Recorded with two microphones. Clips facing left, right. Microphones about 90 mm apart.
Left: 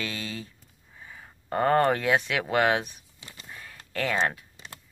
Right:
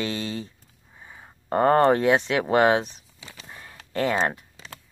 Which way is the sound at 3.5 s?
25° right (ahead or behind).